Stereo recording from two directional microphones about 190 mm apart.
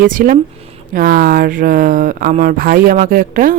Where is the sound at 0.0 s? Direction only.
45° right (ahead or behind).